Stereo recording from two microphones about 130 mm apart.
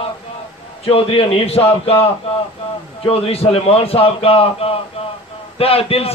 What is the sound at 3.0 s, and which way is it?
A man's voice, 50° left (ahead or behind).